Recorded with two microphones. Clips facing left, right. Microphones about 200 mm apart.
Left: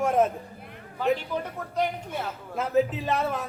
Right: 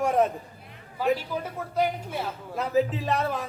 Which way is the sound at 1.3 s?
5° right (ahead or behind).